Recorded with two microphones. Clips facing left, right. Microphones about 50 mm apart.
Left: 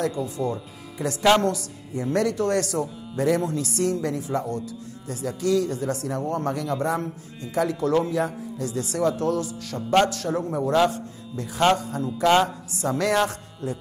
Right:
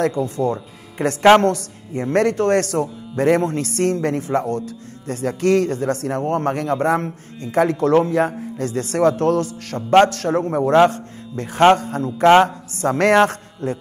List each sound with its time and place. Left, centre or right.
0.2 s speech: centre
1.2 s a man's voice: right